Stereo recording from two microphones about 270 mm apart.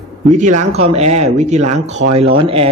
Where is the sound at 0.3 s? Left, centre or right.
Right.